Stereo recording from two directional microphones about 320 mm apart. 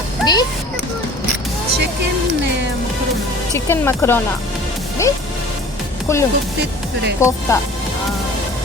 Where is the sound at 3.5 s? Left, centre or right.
Centre.